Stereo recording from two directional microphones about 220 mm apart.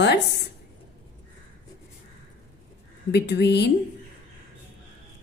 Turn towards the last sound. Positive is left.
turn(degrees=50)  # may be behind; listen again after turning